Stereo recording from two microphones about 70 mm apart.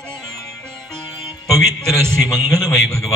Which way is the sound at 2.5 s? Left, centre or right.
Left.